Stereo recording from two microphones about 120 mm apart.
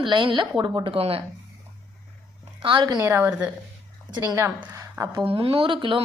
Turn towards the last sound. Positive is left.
turn(degrees=-45)  # may be behind; listen again after turning